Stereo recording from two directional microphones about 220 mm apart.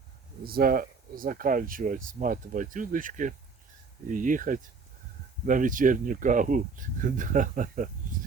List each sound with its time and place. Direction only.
0.4 s speech: 45° right (ahead or behind)